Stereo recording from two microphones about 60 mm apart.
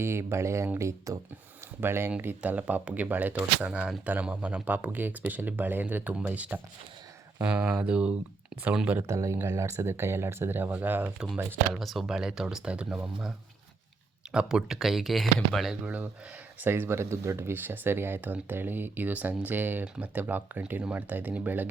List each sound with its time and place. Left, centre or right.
0.0 s speech: right
1.8 s speech: right
2.4 s speech: right
3.7 s speech: centre
9.0 s speech: right
11.7 s speech: centre
14.3 s speech: centre
15.7 s speech: right